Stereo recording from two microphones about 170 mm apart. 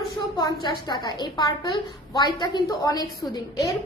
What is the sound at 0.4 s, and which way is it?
A woman's voice, 25° left (ahead or behind).